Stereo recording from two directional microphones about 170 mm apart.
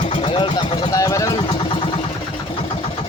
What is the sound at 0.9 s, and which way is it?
Vehicle, 20° left (ahead or behind).